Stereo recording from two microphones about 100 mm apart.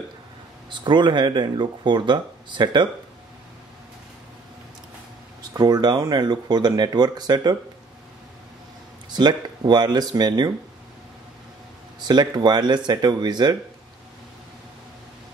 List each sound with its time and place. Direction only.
0.7 s speech: 50° right (ahead or behind)
5.5 s speech: 45° right (ahead or behind)
9.1 s speech: 45° right (ahead or behind)
12.1 s speech: 45° right (ahead or behind)